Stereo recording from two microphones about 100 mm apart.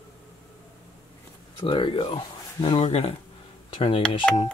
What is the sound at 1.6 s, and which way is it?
Speech, 55° left (ahead or behind).